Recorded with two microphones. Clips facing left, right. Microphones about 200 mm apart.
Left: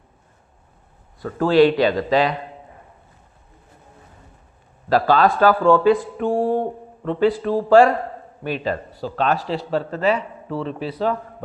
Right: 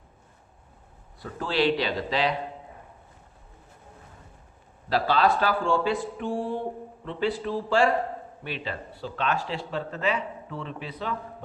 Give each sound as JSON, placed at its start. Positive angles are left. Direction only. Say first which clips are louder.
{"t": 1.2, "sound": "speech", "louder": "left 11 dB", "side_deg": 45}
{"t": 4.9, "sound": "speech", "louder": "left 6 dB", "side_deg": 45}